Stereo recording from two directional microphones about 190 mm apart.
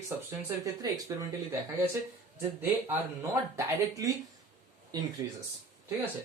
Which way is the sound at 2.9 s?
15° right (ahead or behind).